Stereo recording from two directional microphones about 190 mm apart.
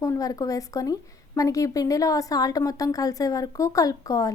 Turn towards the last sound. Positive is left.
turn(degrees=20)  # may be behind; listen again after turning